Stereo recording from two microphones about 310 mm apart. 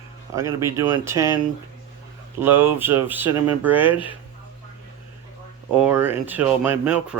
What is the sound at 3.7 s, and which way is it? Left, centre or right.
Speech, centre.